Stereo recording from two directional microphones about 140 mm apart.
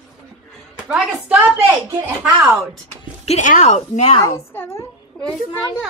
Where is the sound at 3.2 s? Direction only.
55° left (ahead or behind).